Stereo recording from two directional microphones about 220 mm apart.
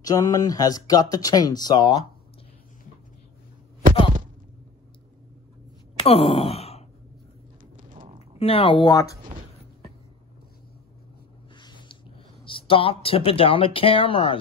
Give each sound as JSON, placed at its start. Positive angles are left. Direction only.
{"t": 0.0, "sound": "speech", "side_deg": 15}
{"t": 5.9, "sound": "sigh", "side_deg": 25}
{"t": 7.7, "sound": "a sound", "side_deg": -40}
{"t": 8.4, "sound": "speech", "side_deg": 25}
{"t": 11.5, "sound": "a sound", "side_deg": 20}
{"t": 12.4, "sound": "speech", "side_deg": 25}